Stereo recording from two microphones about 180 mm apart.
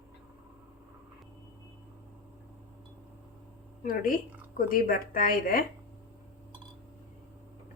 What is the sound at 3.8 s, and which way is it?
A woman's voice, 50° left (ahead or behind).